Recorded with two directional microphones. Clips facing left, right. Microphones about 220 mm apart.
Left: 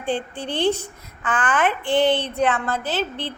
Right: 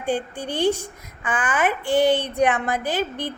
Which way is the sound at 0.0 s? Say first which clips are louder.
Right 1 dB; 10° right (ahead or behind).